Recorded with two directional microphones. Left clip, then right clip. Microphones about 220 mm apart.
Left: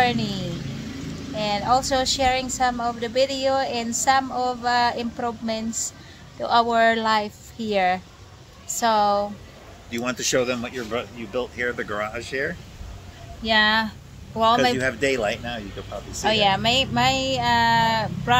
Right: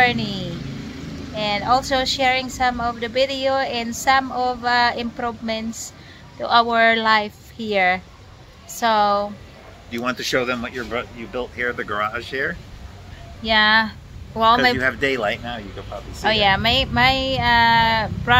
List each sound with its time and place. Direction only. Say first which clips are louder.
0.0 s vehicle: right 4 dB; centre (ahead or behind)
1.3 s a woman's voice: right 2 dB; centre (ahead or behind)
9.8 s speech: right 2 dB; 15° left (ahead or behind)
13.4 s a woman's voice: right 3 dB; centre (ahead or behind)
14.8 s speech: right 2 dB; 20° left (ahead or behind)
16.3 s a woman's voice: right 3 dB; centre (ahead or behind)